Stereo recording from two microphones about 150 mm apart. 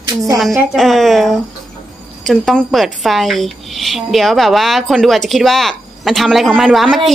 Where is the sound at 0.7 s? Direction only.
Centre (ahead or behind).